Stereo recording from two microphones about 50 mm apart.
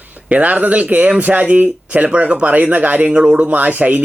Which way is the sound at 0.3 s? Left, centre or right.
Right.